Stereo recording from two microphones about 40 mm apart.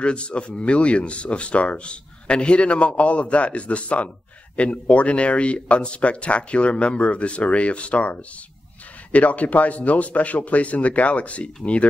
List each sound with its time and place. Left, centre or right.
0.0 s speech: left
9.1 s speech: left